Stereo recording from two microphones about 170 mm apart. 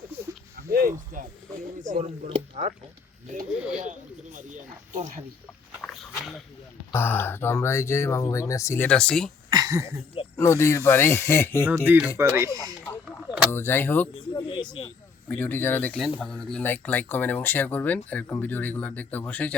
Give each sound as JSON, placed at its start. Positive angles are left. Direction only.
{"t": 0.5, "sound": "a sound", "side_deg": -60}
{"t": 1.8, "sound": "speech", "side_deg": -45}
{"t": 3.8, "sound": "speech", "side_deg": -45}
{"t": 5.8, "sound": "dog", "side_deg": 0}
{"t": 6.9, "sound": "speech", "side_deg": 15}
{"t": 9.5, "sound": "speech", "side_deg": -20}
{"t": 10.3, "sound": "speech", "side_deg": 15}
{"t": 11.6, "sound": "speech", "side_deg": -15}
{"t": 13.5, "sound": "speech", "side_deg": 15}
{"t": 14.3, "sound": "a sound", "side_deg": 25}
{"t": 15.3, "sound": "speech", "side_deg": 10}